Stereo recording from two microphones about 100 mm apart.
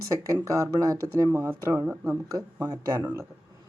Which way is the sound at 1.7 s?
15° right (ahead or behind).